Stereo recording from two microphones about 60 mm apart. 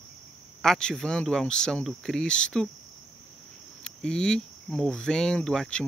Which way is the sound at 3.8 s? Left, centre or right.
Centre.